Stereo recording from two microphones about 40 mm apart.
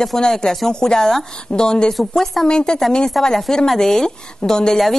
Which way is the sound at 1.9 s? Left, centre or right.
Centre.